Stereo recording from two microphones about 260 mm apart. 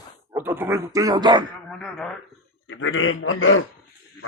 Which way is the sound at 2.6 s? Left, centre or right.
Left.